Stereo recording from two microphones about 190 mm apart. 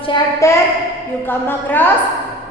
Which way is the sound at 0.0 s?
20° left (ahead or behind).